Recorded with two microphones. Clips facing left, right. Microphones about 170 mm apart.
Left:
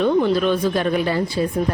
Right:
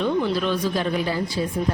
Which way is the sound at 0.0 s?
55° left (ahead or behind).